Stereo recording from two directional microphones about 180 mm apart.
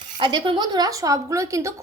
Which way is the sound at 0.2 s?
25° right (ahead or behind).